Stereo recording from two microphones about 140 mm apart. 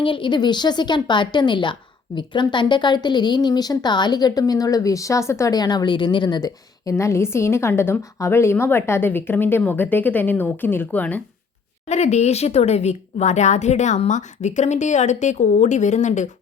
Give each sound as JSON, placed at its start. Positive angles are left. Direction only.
{"t": 0.0, "sound": "a woman's voice", "side_deg": 35}
{"t": 11.9, "sound": "a woman's voice", "side_deg": 50}